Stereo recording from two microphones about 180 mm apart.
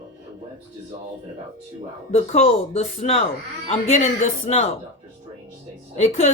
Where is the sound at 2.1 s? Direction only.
35° left (ahead or behind).